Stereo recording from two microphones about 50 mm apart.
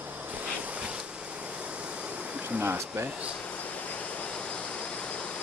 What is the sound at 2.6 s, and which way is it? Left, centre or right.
Speech, right.